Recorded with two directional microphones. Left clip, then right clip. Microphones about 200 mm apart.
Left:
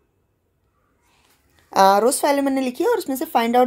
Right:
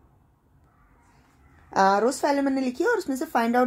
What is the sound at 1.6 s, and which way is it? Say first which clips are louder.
Speech: left 6 dB; 15° left (ahead or behind).